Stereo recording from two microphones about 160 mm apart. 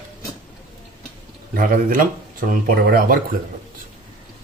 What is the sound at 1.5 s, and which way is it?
Speech, 60° right (ahead or behind).